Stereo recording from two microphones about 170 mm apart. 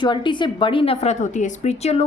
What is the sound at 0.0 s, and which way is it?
A woman's voice, 25° left (ahead or behind).